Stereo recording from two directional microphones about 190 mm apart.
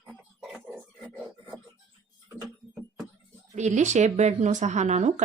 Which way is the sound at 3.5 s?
40° right (ahead or behind).